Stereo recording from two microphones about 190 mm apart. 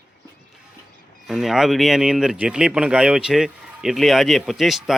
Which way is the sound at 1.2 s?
Centre (ahead or behind).